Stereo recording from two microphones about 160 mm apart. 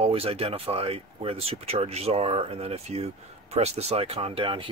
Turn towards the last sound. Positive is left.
turn(degrees=-35)  # may be behind; listen again after turning